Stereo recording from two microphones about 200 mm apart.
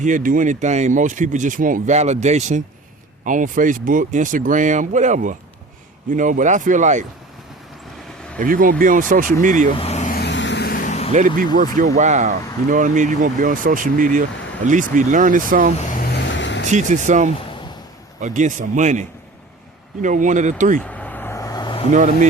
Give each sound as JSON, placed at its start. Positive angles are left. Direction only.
{"t": 0.0, "sound": "speech", "side_deg": -40}
{"t": 8.4, "sound": "speech", "side_deg": -45}
{"t": 9.7, "sound": "vehicle", "side_deg": 30}
{"t": 10.2, "sound": "vehicle", "side_deg": 60}
{"t": 11.8, "sound": "speech", "side_deg": -40}
{"t": 15.8, "sound": "vehicle", "side_deg": 45}
{"t": 16.6, "sound": "speech", "side_deg": -35}
{"t": 20.7, "sound": "vehicle", "side_deg": 5}
{"t": 21.9, "sound": "speech", "side_deg": -40}